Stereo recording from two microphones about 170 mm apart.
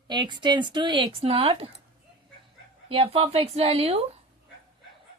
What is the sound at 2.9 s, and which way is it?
A woman's voice, 35° right (ahead or behind).